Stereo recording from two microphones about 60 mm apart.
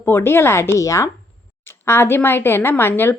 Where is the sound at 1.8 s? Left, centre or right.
Left.